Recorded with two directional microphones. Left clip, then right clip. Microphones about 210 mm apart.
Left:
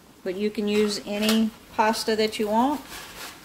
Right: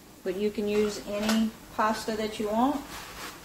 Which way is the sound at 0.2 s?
25° left (ahead or behind).